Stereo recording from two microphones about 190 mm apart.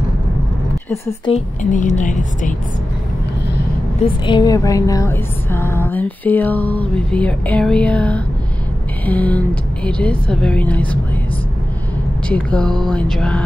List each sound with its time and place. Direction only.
1.6 s a woman's voice: 40° left (ahead or behind)
4.3 s a woman's voice: 20° left (ahead or behind)
12.3 s a woman's voice: 5° left (ahead or behind)